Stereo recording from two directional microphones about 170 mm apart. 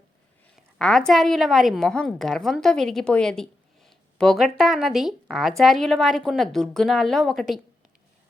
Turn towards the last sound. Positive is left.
turn(degrees=0)  # may be behind; listen again after turning